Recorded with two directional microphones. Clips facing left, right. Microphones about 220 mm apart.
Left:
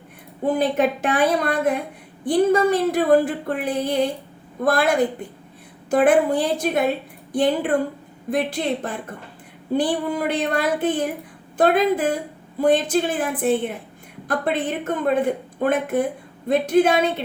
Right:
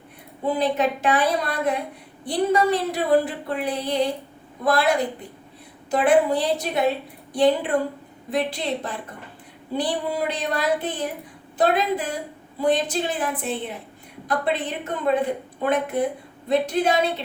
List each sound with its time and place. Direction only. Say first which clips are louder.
0.4 s a woman's voice: left 3 dB; 50° left (ahead or behind)
8.3 s a woman's voice: left 3 dB; 50° left (ahead or behind)